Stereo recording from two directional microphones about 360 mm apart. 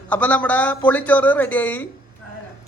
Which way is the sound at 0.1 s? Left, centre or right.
Centre.